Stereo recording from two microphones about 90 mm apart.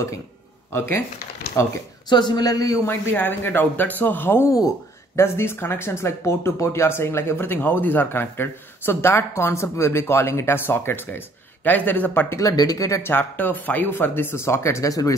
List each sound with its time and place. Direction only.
0.7 s speech: 25° left (ahead or behind)
2.0 s speech: 55° left (ahead or behind)
2.9 s speech: 25° left (ahead or behind)
4.5 s speech: 40° left (ahead or behind)
5.2 s speech: 30° left (ahead or behind)
12.4 s speech: 40° left (ahead or behind)
13.1 s speech: 20° left (ahead or behind); by 15.1 s 40° left (ahead or behind)